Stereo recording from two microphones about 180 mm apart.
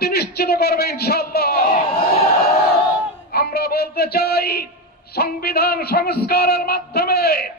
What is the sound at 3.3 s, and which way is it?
A man's voice, 60° left (ahead or behind).